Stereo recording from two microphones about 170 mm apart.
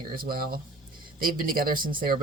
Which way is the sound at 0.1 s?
60° right (ahead or behind).